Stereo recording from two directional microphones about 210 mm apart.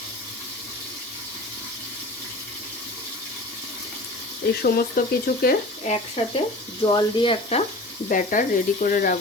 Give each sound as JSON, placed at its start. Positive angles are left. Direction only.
{"t": 4.6, "sound": "speech", "side_deg": 45}
{"t": 5.9, "sound": "speech", "side_deg": 30}
{"t": 8.1, "sound": "speech", "side_deg": 40}